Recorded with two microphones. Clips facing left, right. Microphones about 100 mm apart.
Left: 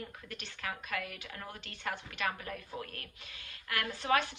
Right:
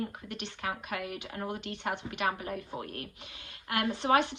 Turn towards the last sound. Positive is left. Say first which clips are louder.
# right 5 dB
turn(degrees=-25)  # may be behind; listen again after turning